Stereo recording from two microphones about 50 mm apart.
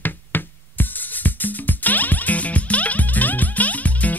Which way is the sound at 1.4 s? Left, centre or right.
Left.